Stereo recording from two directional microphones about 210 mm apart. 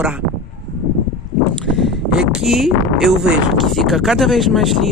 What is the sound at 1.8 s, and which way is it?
Speech, centre (ahead or behind).